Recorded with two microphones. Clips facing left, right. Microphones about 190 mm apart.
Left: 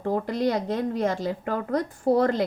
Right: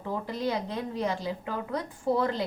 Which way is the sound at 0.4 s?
45° left (ahead or behind).